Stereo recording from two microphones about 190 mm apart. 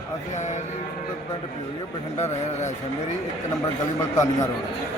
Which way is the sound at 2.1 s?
35° left (ahead or behind).